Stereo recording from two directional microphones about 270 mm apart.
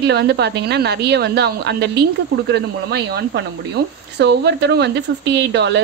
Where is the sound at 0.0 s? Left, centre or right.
Right.